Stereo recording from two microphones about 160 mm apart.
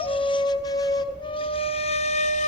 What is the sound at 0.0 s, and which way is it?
Flute, 35° left (ahead or behind).